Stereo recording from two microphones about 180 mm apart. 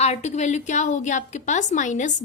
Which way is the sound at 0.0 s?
40° left (ahead or behind).